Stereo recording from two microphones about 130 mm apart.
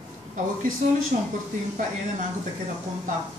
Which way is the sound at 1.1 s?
70° right (ahead or behind).